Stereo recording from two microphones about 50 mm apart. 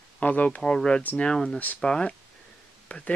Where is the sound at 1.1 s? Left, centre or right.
Centre.